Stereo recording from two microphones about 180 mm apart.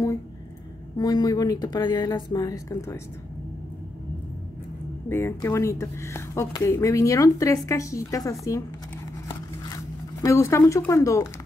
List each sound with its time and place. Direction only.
0.9 s speech: 20° left (ahead or behind)
5.1 s speech: 15° left (ahead or behind)
10.2 s speech: 15° left (ahead or behind)